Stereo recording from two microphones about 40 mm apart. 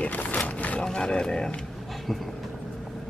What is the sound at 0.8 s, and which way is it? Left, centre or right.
Speech, centre.